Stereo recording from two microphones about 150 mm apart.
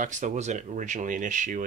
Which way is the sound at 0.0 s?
55° right (ahead or behind).